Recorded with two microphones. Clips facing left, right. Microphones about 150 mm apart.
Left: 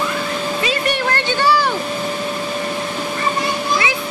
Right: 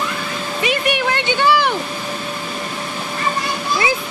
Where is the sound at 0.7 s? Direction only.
15° right (ahead or behind).